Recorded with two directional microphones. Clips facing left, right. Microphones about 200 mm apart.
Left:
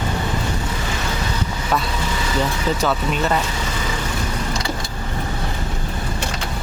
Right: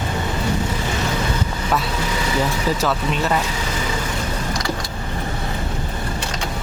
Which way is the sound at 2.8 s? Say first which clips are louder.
Left 1 dB; centre (ahead or behind).